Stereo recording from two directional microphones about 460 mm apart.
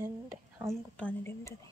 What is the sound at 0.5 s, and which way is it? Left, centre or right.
A woman's voice, centre.